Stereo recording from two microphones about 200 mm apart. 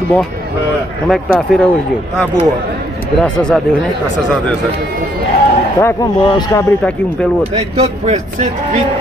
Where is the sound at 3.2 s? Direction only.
5° left (ahead or behind).